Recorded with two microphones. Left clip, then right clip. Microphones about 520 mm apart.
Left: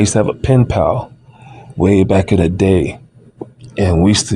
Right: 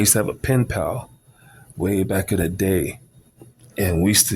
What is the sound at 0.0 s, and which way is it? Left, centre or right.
Speech, right.